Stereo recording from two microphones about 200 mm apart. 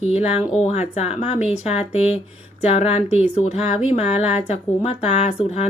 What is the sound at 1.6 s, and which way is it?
Speech, 30° left (ahead or behind).